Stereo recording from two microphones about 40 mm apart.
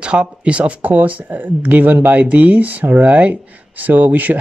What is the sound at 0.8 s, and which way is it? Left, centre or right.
Speech, right.